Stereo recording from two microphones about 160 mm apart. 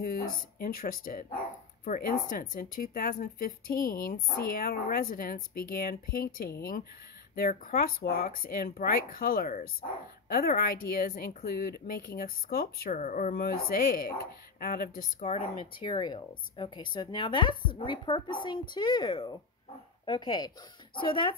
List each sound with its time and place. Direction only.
0.0 s speech: 65° left (ahead or behind)
12.9 s speech: 50° left (ahead or behind)
15.2 s speech: 40° left (ahead or behind)